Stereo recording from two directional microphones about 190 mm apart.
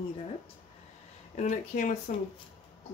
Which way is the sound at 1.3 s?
40° left (ahead or behind).